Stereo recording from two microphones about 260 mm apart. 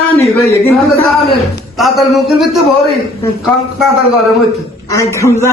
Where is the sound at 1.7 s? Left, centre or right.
Centre.